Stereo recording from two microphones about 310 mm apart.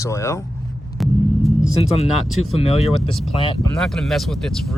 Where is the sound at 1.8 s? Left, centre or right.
Centre.